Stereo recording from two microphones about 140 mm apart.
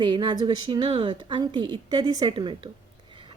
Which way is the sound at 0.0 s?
35° right (ahead or behind).